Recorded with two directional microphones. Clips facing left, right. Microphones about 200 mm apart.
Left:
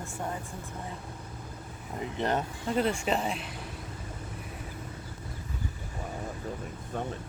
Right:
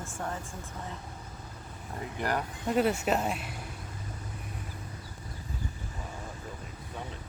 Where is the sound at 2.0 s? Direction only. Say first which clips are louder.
Left 3 dB; 20° left (ahead or behind).